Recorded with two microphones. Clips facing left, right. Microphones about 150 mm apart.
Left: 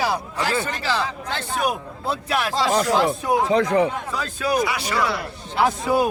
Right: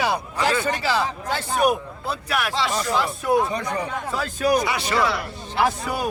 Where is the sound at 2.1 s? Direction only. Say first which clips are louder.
Left 2 dB; 25° left (ahead or behind).